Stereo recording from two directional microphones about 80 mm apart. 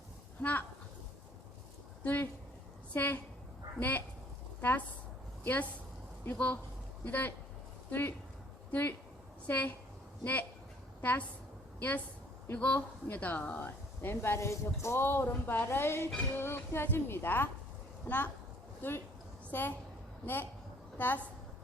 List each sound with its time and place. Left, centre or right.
0.4 s speech: centre
2.0 s a woman's voice: left
11.0 s a woman's voice: left